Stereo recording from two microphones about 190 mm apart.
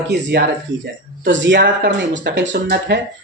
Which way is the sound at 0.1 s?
65° right (ahead or behind).